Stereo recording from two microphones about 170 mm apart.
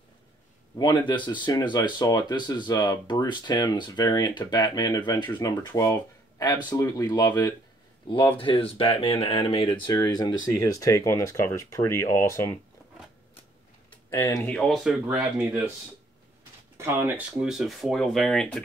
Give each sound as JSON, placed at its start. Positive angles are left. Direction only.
{"t": 0.7, "sound": "speech", "side_deg": 25}
{"t": 14.1, "sound": "speech", "side_deg": 15}
{"t": 16.7, "sound": "speech", "side_deg": -15}
{"t": 17.4, "sound": "speech", "side_deg": -5}